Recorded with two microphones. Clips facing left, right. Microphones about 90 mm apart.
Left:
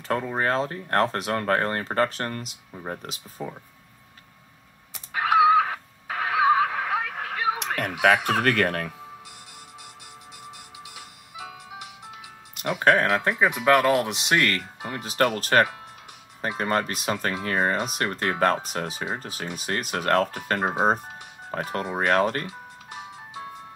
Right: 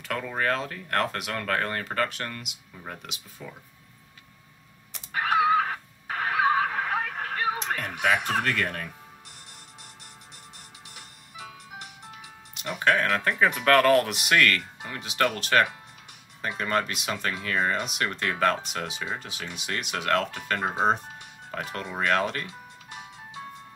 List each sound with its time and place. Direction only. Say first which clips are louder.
0.1 s speech: left 3 dB; 30° left (ahead or behind)
4.9 s a sound: left 4 dB; 15° left (ahead or behind)
6.2 s neigh: left 3 dB; 15° left (ahead or behind)
7.5 s speech: left 2 dB; 60° left (ahead or behind)
12.7 s speech: left 4 dB; 35° left (ahead or behind)
13.0 s speech: left 2 dB; 20° left (ahead or behind); by 22.5 s 40° left (ahead or behind)